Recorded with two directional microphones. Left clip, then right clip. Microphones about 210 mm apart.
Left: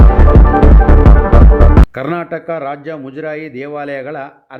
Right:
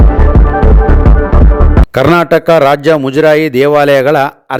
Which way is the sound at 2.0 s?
45° right (ahead or behind).